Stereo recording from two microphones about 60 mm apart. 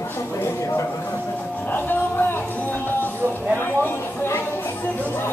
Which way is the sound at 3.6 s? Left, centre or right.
Left.